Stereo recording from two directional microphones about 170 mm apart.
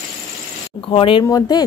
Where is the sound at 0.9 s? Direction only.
30° left (ahead or behind).